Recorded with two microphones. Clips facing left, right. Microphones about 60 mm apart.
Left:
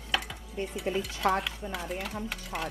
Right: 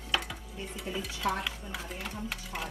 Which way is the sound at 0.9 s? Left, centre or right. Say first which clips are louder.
Left 6 dB; left.